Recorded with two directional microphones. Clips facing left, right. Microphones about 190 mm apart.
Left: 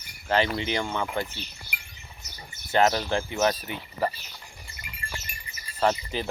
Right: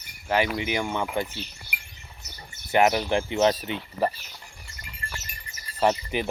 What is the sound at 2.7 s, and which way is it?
Speech, 15° right (ahead or behind).